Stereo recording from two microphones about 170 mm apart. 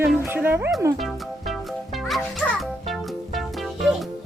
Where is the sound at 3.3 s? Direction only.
Centre (ahead or behind).